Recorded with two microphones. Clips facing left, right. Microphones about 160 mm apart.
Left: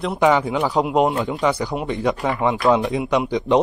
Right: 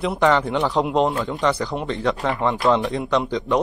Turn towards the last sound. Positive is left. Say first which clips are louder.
# left 3 dB
turn(degrees=15)  # may be behind; listen again after turning